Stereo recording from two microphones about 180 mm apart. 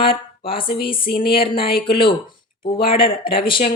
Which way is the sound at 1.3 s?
30° left (ahead or behind).